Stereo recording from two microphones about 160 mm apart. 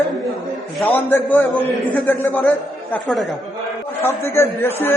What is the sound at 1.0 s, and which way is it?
A man's voice, 10° left (ahead or behind).